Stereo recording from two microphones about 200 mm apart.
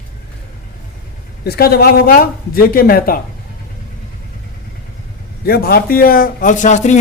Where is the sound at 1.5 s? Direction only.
50° left (ahead or behind).